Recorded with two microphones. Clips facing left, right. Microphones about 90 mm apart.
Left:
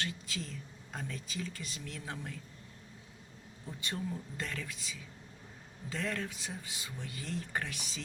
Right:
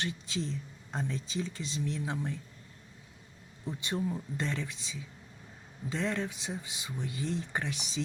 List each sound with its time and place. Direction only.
0.0 s speech: 20° right (ahead or behind)
3.8 s speech: 20° right (ahead or behind)